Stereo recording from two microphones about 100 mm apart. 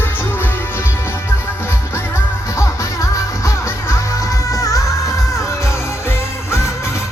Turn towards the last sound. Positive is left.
turn(degrees=25)  # may be behind; listen again after turning